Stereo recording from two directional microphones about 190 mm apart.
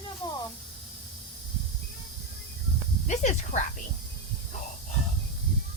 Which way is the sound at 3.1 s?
35° left (ahead or behind).